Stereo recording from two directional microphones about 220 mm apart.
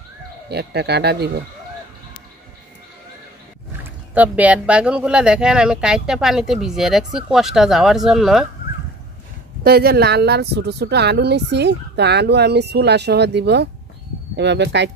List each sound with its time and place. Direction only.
0.5 s speech: 50° right (ahead or behind)
4.1 s speech: 5° right (ahead or behind)
9.6 s speech: 45° right (ahead or behind)